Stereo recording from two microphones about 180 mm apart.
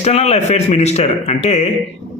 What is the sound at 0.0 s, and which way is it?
A man's voice, 35° left (ahead or behind).